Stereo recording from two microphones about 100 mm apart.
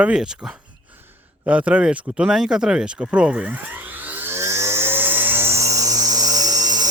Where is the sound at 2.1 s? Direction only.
5° right (ahead or behind).